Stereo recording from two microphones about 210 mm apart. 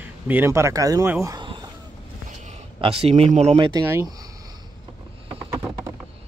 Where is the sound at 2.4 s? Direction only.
30° right (ahead or behind).